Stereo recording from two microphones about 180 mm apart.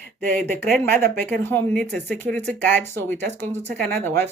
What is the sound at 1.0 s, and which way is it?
Speech, 10° left (ahead or behind).